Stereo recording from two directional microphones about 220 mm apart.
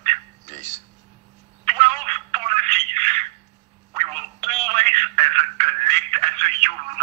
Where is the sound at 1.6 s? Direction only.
30° right (ahead or behind).